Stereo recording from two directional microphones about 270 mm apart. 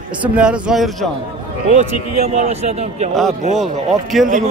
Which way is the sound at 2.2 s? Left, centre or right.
Right.